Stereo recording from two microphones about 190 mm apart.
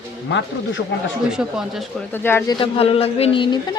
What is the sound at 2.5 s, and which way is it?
Speech, 30° left (ahead or behind).